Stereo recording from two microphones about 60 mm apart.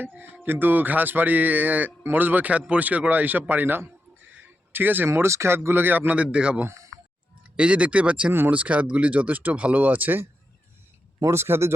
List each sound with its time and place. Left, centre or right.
0.0 s speech: right
4.3 s a sound: right
5.0 s speech: right
5.5 s speech: right
6.1 s speech: centre
6.7 s a sound: right
7.5 s speech: centre
8.3 s speech: right
8.5 s speech: right
11.2 s speech: right